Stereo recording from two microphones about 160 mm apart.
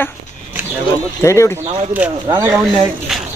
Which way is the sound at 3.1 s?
5° right (ahead or behind).